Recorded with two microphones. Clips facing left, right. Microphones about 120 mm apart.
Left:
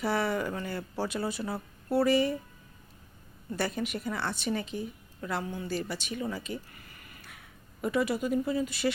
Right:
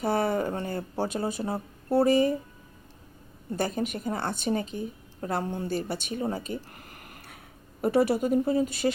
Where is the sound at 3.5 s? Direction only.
40° right (ahead or behind).